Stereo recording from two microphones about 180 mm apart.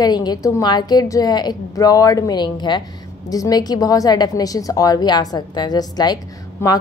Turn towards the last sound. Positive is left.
turn(degrees=20)  # may be behind; listen again after turning